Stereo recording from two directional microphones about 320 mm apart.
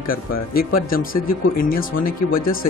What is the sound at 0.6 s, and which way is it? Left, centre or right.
Speech, left.